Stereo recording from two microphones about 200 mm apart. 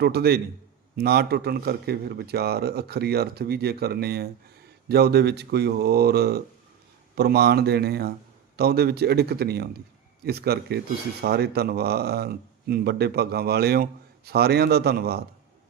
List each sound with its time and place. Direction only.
0.0 s speech: 50° right (ahead or behind)